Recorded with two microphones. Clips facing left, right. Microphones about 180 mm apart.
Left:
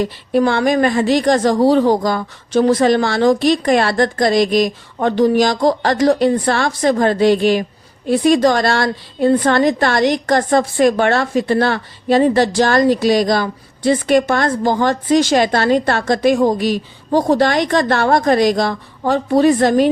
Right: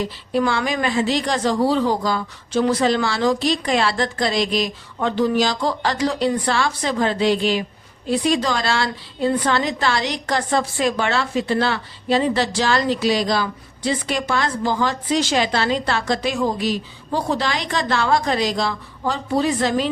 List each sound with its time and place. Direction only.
0.0 s a woman's voice: 55° left (ahead or behind)